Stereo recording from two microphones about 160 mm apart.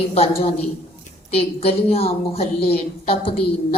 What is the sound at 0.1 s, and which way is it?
A woman's voice, 40° left (ahead or behind).